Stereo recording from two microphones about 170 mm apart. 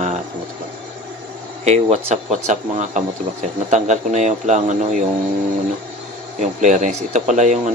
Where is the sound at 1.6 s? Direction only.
40° right (ahead or behind).